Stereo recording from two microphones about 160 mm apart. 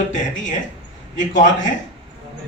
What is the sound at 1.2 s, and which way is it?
Speech, 50° left (ahead or behind).